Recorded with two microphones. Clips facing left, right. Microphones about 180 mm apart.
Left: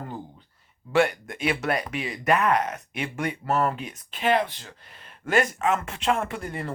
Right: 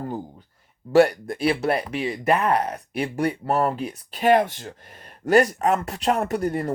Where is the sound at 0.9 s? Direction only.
35° right (ahead or behind).